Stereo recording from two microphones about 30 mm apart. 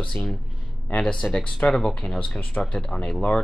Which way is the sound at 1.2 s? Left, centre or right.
Left.